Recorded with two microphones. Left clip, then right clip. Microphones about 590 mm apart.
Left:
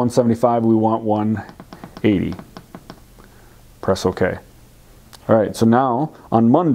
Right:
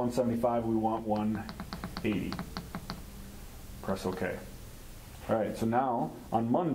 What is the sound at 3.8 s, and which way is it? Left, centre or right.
Speech, left.